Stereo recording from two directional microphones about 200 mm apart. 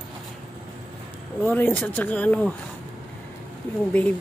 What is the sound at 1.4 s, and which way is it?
Speech, 10° left (ahead or behind).